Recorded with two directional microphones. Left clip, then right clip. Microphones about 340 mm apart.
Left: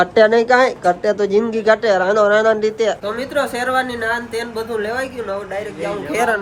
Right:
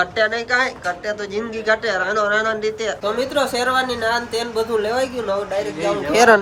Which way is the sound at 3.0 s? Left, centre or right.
Centre.